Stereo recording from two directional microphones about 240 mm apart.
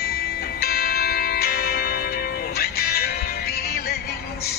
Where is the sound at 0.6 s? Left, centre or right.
Left.